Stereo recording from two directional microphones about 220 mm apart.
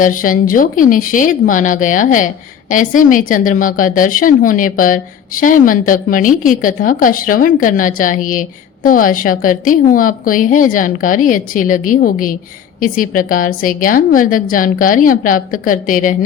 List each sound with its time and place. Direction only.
0.0 s a woman's voice: 40° left (ahead or behind)